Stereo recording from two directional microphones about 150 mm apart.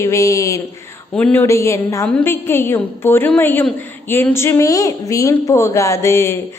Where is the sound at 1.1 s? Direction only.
10° left (ahead or behind).